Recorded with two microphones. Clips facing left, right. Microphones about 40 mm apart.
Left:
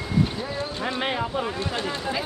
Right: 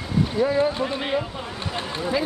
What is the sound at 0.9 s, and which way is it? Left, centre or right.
Speech, left.